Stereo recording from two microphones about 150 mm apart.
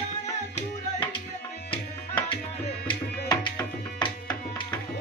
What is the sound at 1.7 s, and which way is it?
Tabla, 35° left (ahead or behind).